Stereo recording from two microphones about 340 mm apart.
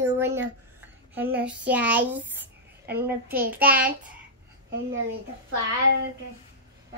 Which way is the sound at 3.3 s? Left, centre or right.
Right.